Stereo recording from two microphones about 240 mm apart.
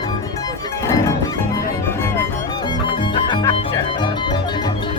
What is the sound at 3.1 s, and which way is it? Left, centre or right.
Music, centre.